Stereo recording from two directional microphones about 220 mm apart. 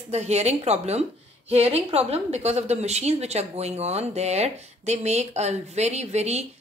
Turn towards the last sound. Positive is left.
turn(degrees=-30)  # may be behind; listen again after turning